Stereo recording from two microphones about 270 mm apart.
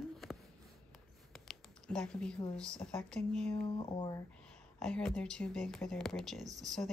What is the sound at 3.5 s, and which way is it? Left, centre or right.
Speech, centre.